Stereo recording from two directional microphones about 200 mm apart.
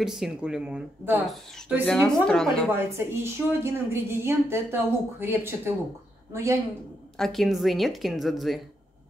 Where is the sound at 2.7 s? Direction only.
10° right (ahead or behind).